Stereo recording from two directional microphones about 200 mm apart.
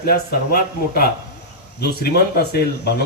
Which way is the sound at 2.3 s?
55° left (ahead or behind).